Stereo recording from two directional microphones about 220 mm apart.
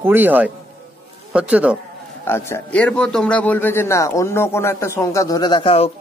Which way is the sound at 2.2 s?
10° left (ahead or behind).